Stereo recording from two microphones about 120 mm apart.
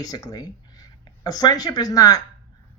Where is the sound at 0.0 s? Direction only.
30° left (ahead or behind).